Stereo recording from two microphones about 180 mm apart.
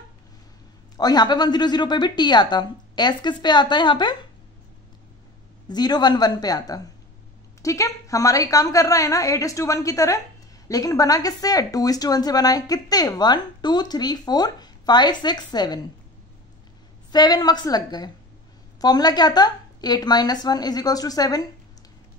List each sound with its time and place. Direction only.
0.9 s speech: 20° left (ahead or behind)
5.7 s a woman's voice: 25° left (ahead or behind)
17.1 s speech: 20° left (ahead or behind)